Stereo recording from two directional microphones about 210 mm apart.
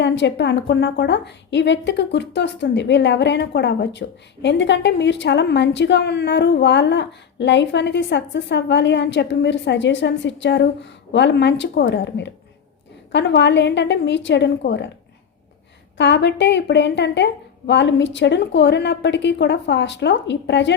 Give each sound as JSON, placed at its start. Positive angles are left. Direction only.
{"t": 0.0, "sound": "a woman's voice", "side_deg": 55}
{"t": 16.0, "sound": "a woman's voice", "side_deg": 55}